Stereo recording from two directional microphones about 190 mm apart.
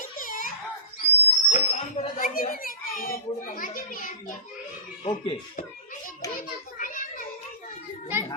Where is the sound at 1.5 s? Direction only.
40° left (ahead or behind).